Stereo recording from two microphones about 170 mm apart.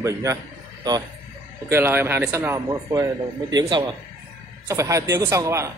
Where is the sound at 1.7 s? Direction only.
15° right (ahead or behind).